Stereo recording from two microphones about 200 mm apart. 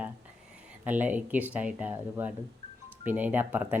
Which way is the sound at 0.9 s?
10° right (ahead or behind).